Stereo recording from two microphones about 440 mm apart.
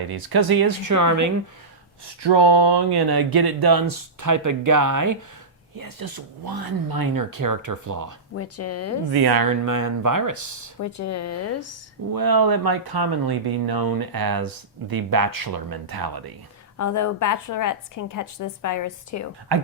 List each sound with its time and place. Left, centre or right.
0.1 s speech: right
2.2 s speech: right
8.3 s speech: left
9.1 s speech: right
10.8 s speech: left
12.1 s speech: right
16.7 s a woman's voice: left